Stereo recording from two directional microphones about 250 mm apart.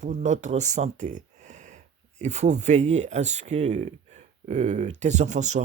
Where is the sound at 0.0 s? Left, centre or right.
Right.